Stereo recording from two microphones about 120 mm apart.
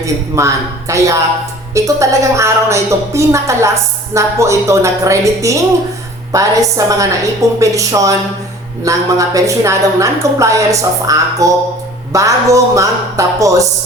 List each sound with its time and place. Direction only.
0.0 s a woman's voice: 25° right (ahead or behind)